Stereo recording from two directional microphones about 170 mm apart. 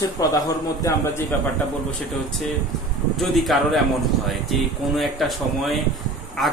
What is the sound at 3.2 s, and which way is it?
Speech, centre (ahead or behind).